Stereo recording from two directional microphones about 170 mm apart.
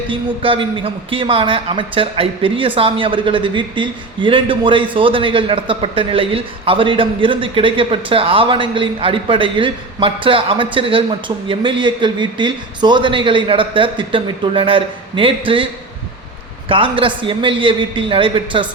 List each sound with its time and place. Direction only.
0.1 s a man's voice: 30° right (ahead or behind)